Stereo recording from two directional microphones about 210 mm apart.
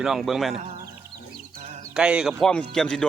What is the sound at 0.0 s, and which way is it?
Speech, centre (ahead or behind).